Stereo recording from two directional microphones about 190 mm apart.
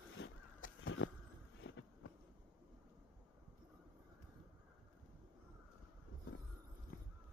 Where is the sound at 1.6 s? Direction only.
70° left (ahead or behind).